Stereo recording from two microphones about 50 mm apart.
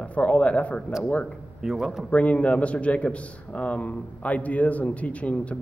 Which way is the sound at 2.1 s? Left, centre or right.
Left.